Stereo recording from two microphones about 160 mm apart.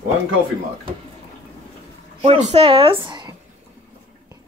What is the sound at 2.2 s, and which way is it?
Speech, 40° right (ahead or behind).